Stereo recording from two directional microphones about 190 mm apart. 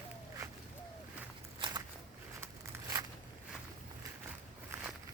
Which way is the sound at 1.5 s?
25° right (ahead or behind).